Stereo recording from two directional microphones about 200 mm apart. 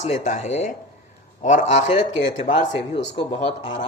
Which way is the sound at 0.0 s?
35° left (ahead or behind).